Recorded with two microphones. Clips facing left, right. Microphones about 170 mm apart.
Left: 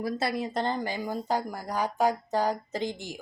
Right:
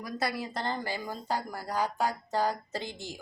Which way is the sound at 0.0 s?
25° left (ahead or behind).